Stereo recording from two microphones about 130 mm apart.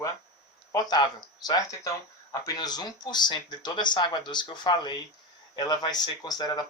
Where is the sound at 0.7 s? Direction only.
30° left (ahead or behind).